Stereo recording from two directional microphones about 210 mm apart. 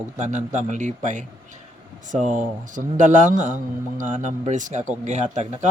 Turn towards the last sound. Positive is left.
turn(degrees=-35)  # may be behind; listen again after turning